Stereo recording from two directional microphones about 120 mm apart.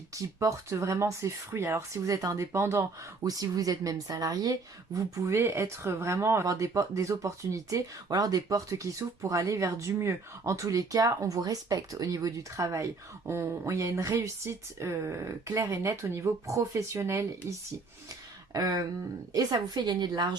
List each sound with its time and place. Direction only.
0.1 s speech: 25° right (ahead or behind)
3.2 s speech: 30° right (ahead or behind)